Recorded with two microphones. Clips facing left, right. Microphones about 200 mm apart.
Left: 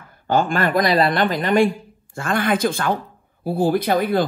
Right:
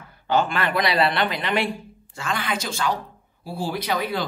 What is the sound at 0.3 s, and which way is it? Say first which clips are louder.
Speech: left 4 dB; 45° left (ahead or behind).